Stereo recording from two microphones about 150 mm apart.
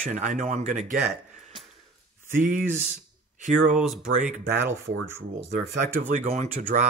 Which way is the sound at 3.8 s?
5° right (ahead or behind).